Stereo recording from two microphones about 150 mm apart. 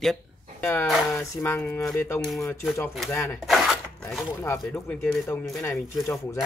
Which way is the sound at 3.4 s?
Centre (ahead or behind).